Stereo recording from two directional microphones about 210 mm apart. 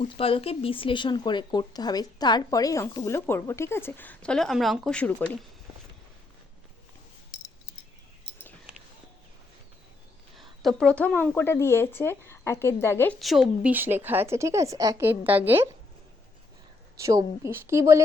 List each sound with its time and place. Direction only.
0.0 s speech: 25° left (ahead or behind); by 5.1 s 5° left (ahead or behind)
10.3 s a sound: centre (ahead or behind)
11.3 s speech: 10° left (ahead or behind); by 15.7 s 10° right (ahead or behind)
17.0 s speech: 15° right (ahead or behind)